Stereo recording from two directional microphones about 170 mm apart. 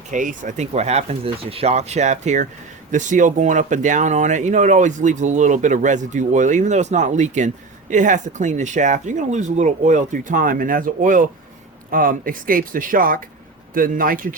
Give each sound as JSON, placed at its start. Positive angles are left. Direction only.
{"t": 0.1, "sound": "speech", "side_deg": -50}